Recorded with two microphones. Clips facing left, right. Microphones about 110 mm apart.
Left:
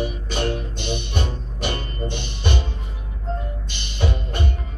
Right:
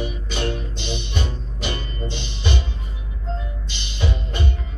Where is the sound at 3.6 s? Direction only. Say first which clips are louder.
Left 1 dB; 50° left (ahead or behind).